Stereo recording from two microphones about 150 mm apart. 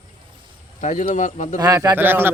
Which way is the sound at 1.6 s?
25° right (ahead or behind).